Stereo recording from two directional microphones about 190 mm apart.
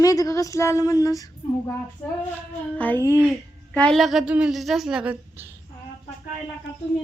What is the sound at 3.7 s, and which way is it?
Speech, 5° left (ahead or behind).